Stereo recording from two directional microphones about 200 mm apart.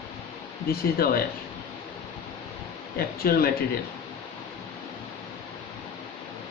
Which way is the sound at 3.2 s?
50° left (ahead or behind).